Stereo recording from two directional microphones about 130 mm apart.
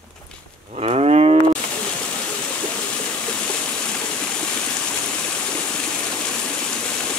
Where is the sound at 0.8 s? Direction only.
50° right (ahead or behind).